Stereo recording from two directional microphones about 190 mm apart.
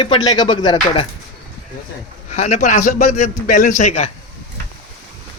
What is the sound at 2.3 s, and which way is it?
Speech, 35° left (ahead or behind).